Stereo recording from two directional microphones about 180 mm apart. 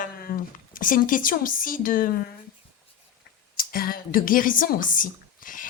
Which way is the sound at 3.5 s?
55° left (ahead or behind).